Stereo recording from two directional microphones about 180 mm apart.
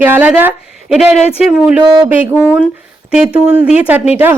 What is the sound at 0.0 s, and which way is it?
Speech, 10° right (ahead or behind).